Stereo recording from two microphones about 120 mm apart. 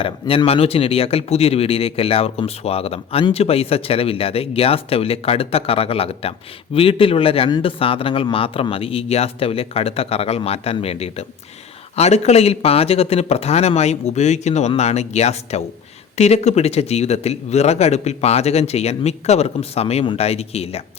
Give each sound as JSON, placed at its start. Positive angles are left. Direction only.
{"t": 0.0, "sound": "speech", "side_deg": 50}